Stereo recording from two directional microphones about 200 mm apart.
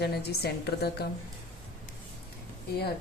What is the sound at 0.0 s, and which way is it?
A woman's voice, 55° left (ahead or behind).